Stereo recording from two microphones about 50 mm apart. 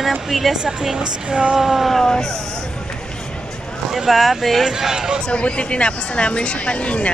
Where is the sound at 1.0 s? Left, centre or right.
Centre.